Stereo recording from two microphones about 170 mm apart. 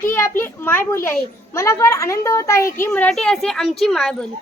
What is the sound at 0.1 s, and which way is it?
A child's voice, 15° left (ahead or behind).